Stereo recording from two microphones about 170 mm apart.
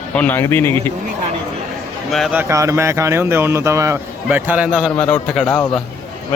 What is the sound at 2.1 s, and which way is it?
Speech, centre (ahead or behind).